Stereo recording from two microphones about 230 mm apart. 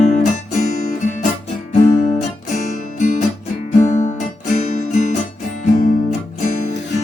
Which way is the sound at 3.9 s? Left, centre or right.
Left.